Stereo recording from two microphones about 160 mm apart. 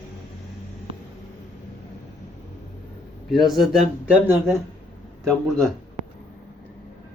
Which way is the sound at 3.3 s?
Centre (ahead or behind).